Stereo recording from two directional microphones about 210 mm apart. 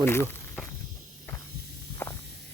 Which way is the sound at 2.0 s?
10° left (ahead or behind).